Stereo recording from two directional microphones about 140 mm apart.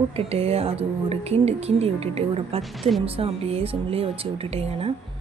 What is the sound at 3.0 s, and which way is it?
A woman's voice, 45° right (ahead or behind).